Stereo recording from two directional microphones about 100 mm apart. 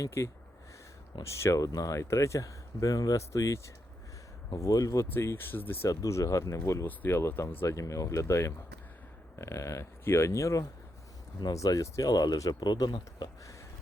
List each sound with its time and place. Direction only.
0.0 s speech: 30° left (ahead or behind)
5.1 s speech: 25° left (ahead or behind)
5.9 s speech: 35° left (ahead or behind)